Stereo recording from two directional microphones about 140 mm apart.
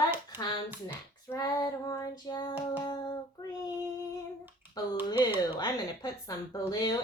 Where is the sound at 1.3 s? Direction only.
25° left (ahead or behind).